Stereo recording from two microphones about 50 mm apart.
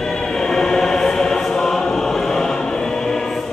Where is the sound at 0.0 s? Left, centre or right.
Centre.